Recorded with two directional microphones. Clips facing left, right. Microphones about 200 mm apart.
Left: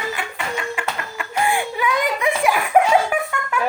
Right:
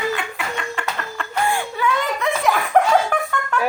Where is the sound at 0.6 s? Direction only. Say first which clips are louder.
Left 2 dB; 10° left (ahead or behind).